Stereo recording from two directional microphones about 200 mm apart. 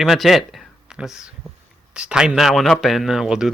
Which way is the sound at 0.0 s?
Centre (ahead or behind).